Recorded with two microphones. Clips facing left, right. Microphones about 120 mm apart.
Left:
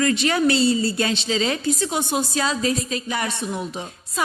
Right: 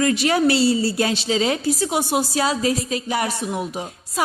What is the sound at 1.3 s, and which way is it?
A woman's voice, 15° right (ahead or behind).